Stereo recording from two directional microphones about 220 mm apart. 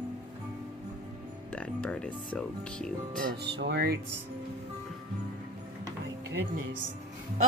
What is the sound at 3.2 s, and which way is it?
Music, 50° right (ahead or behind).